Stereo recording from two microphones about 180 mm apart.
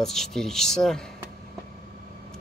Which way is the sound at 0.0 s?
Centre (ahead or behind).